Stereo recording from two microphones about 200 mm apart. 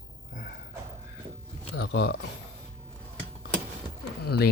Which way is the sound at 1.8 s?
60° left (ahead or behind).